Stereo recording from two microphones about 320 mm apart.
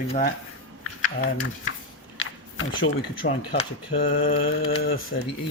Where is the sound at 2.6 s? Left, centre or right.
Left.